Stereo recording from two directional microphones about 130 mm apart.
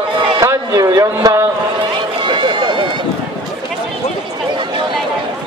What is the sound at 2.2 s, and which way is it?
Run, 35° right (ahead or behind).